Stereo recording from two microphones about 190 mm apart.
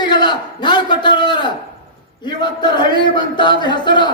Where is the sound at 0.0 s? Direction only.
25° left (ahead or behind).